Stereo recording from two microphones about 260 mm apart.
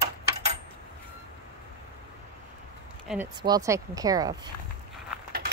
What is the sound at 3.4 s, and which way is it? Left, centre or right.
Speech, centre.